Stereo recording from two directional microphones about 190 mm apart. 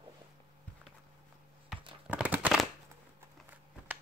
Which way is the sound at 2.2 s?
5° right (ahead or behind).